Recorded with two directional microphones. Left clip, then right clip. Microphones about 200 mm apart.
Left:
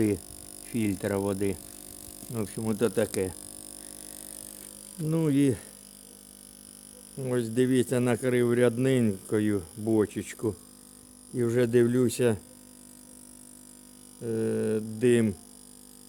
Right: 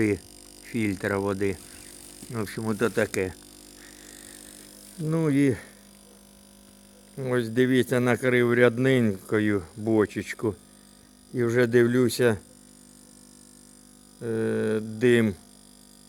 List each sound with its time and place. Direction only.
0.6 s speech: 15° left (ahead or behind)
2.3 s speech: 5° left (ahead or behind)
5.0 s speech: 10° left (ahead or behind)
7.2 s speech: 5° left (ahead or behind)
14.2 s speech: centre (ahead or behind)